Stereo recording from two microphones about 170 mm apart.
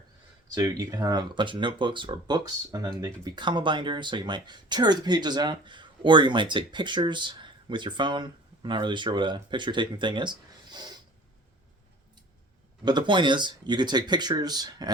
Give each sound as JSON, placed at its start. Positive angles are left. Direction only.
{"t": 0.5, "sound": "speech", "side_deg": -20}
{"t": 12.8, "sound": "speech", "side_deg": -25}